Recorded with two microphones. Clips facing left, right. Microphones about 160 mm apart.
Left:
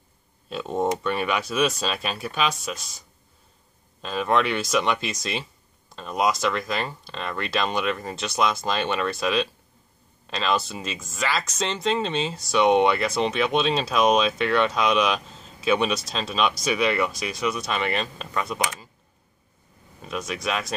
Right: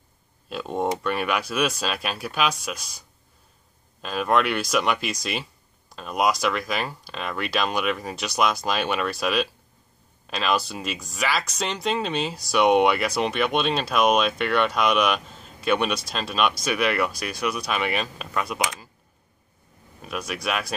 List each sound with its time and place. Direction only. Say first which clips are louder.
0.5 s speech: left 1 dB; centre (ahead or behind)
4.0 s speech: even; 5° right (ahead or behind)
20.0 s speech: left 1 dB; 5° right (ahead or behind)